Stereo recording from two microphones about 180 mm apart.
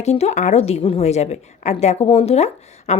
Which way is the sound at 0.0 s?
35° left (ahead or behind).